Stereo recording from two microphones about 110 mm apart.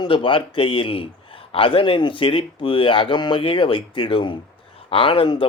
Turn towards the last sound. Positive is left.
turn(degrees=50)  # may be behind; listen again after turning